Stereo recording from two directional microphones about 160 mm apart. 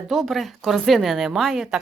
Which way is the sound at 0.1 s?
Centre (ahead or behind).